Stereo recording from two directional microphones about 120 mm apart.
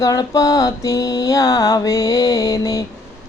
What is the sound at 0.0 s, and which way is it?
Mantra, 30° left (ahead or behind).